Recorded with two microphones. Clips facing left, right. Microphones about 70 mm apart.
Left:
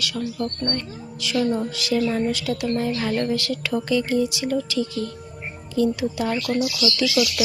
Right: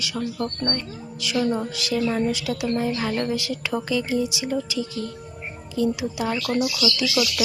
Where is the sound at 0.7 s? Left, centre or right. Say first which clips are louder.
Left 1 dB; centre.